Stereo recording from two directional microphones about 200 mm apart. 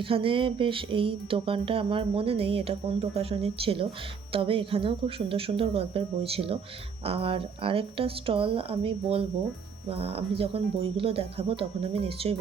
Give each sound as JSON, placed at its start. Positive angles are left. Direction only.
{"t": 0.0, "sound": "speech", "side_deg": -25}